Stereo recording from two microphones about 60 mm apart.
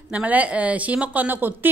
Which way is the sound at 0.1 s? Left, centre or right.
Right.